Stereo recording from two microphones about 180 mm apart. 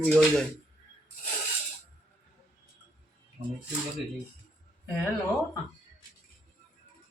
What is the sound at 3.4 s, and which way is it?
Speech, 40° right (ahead or behind).